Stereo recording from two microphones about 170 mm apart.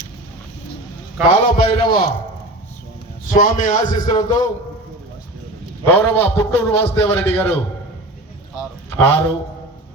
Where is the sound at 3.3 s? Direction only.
50° left (ahead or behind).